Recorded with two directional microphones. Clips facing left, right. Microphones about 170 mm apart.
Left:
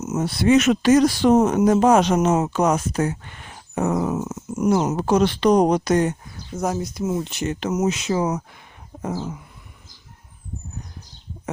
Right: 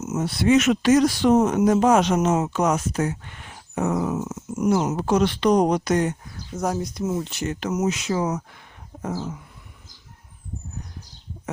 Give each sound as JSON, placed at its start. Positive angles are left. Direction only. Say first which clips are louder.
{"t": 0.0, "sound": "speech", "louder": "left 2 dB", "side_deg": 40}
{"t": 6.5, "sound": "speech", "louder": "left 1 dB", "side_deg": 5}
{"t": 9.0, "sound": "a sound", "louder": "left 1 dB", "side_deg": 15}